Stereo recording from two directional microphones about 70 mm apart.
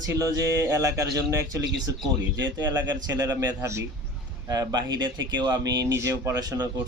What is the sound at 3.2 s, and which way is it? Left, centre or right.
Speech, right.